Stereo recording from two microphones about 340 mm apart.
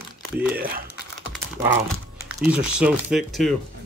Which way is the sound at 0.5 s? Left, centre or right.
Right.